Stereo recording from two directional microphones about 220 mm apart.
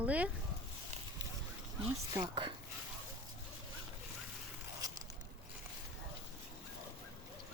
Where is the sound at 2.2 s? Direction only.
20° right (ahead or behind).